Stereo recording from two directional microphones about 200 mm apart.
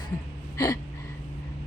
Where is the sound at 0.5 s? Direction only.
15° left (ahead or behind).